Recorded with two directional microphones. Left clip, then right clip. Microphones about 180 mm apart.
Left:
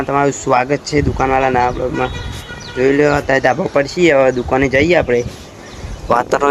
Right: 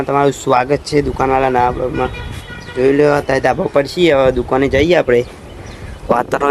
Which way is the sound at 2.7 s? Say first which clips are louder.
Right 1 dB; 10° right (ahead or behind).